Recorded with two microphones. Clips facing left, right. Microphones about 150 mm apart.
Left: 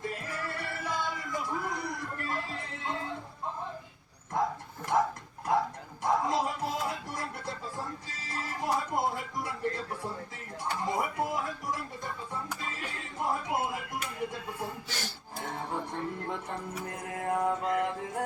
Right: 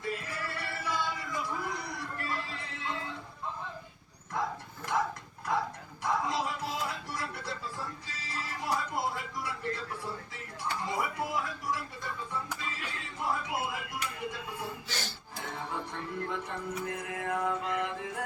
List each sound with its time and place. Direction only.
0.1 s music: 45° left (ahead or behind)
4.3 s bow-wow: 50° left (ahead or behind)
4.9 s dog: 45° left (ahead or behind)
6.0 s music: 45° left (ahead or behind)
14.8 s music: 10° left (ahead or behind)
15.4 s music: 45° left (ahead or behind)